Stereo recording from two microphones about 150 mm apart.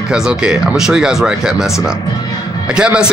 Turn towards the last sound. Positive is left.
turn(degrees=-5)  # may be behind; listen again after turning